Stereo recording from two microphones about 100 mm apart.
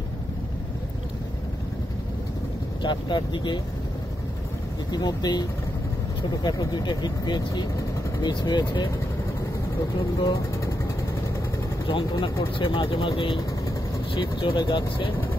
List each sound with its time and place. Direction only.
2.8 s speech: 50° left (ahead or behind)
4.9 s speech: 45° left (ahead or behind)
6.4 s speech: 40° left (ahead or behind)
11.9 s speech: 60° left (ahead or behind)
14.6 s speech: 50° left (ahead or behind)